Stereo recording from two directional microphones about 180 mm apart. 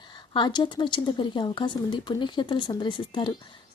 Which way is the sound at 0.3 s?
25° left (ahead or behind).